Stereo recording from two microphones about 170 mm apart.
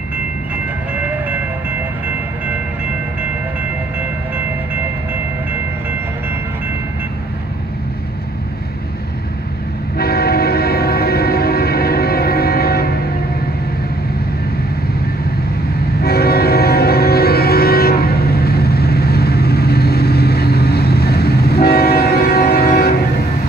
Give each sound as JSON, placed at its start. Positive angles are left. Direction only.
{"t": 0.9, "sound": "train", "side_deg": -10}
{"t": 9.9, "sound": "train horn", "side_deg": 65}
{"t": 16.0, "sound": "music", "side_deg": 70}